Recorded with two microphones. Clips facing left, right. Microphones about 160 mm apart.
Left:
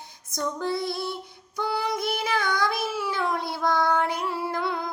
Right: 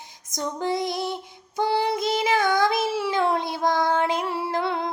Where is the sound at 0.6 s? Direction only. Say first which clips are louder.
Right 5 dB; 20° right (ahead or behind).